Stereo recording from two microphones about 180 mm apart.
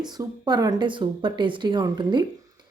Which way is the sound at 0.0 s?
25° right (ahead or behind).